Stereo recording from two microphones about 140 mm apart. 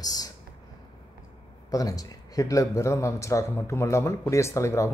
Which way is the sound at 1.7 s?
25° left (ahead or behind).